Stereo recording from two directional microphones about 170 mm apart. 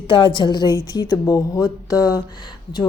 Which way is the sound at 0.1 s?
25° left (ahead or behind).